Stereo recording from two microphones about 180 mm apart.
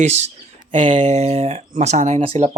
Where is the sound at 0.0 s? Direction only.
40° right (ahead or behind).